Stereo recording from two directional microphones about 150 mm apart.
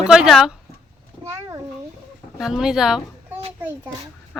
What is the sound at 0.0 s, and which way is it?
Speech, 5° right (ahead or behind).